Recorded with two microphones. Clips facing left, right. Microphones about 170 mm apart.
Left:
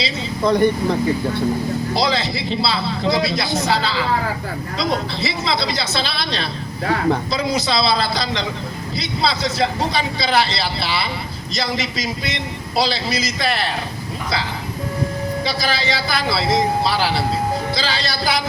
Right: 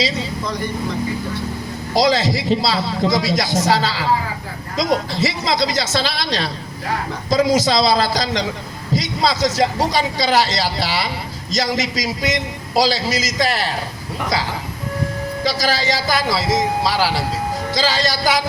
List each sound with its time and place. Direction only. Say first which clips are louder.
0.4 s speech: left 12 dB; 60° left (ahead or behind)
2.0 s a man's voice: right 8 dB; 40° right (ahead or behind)
15.4 s a man's voice: right 5 dB; 40° right (ahead or behind)